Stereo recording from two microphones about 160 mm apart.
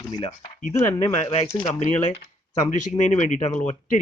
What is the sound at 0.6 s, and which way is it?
A man's voice, 45° left (ahead or behind).